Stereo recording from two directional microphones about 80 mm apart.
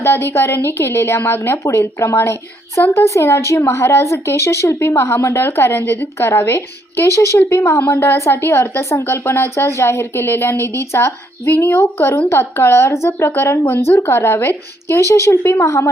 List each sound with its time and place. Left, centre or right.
0.0 s a woman's voice: left